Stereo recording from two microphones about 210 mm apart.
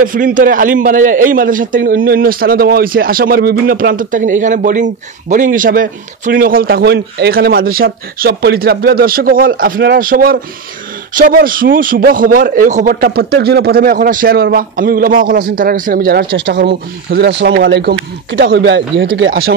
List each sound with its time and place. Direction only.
0.0 s a man's voice: 40° right (ahead or behind)